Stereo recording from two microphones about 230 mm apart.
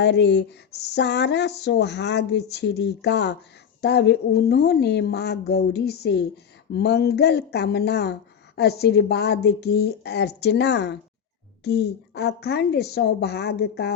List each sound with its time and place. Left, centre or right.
0.0 s speech: left